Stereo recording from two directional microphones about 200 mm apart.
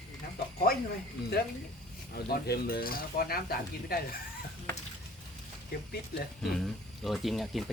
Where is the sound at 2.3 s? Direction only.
50° left (ahead or behind).